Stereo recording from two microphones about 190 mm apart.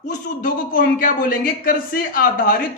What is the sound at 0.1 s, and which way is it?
A man's voice, 45° left (ahead or behind).